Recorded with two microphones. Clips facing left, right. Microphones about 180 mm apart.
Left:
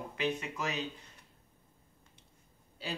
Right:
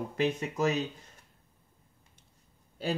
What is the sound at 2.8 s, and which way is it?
Speech, 50° right (ahead or behind).